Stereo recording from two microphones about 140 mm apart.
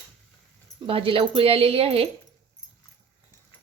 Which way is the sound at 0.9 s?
40° right (ahead or behind).